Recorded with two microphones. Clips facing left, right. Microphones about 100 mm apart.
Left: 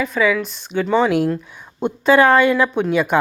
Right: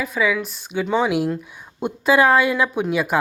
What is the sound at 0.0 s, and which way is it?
A woman's voice, 5° right (ahead or behind).